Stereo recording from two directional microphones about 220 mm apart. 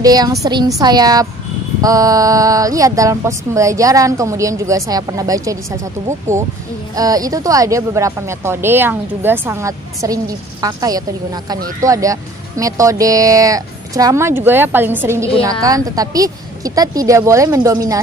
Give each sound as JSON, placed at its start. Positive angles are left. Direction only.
{"t": 0.0, "sound": "a woman's voice", "side_deg": -15}